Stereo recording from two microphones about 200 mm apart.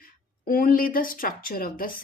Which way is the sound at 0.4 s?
45° left (ahead or behind).